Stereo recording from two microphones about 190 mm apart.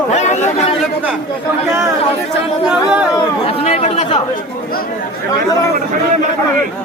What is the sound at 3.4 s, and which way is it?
Speech, 35° left (ahead or behind).